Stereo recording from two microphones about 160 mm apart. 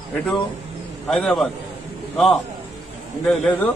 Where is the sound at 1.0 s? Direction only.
5° left (ahead or behind).